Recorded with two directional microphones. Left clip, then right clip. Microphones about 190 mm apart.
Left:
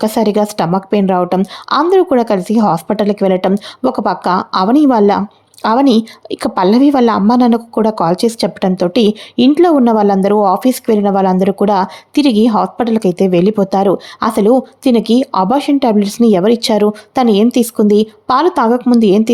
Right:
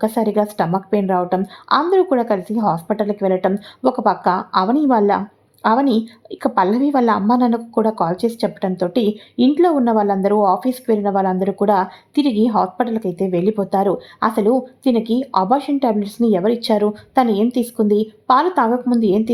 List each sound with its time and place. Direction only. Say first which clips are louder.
0.0 s a woman's voice: left 5 dB; 35° left (ahead or behind)